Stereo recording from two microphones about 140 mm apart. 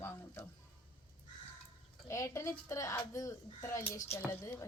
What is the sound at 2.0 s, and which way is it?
Speech, 20° left (ahead or behind).